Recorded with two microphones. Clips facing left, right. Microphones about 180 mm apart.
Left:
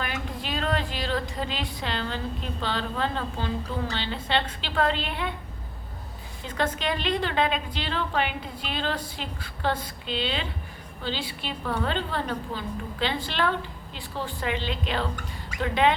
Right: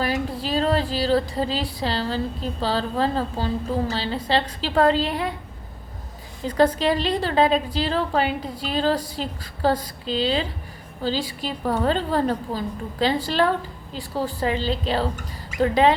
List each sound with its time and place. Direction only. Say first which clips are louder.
0.0 s a woman's voice: right 8 dB; 35° right (ahead or behind)
6.4 s a woman's voice: right 9 dB; 35° right (ahead or behind)